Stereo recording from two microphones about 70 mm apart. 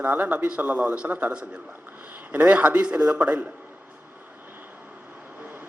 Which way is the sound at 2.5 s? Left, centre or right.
Right.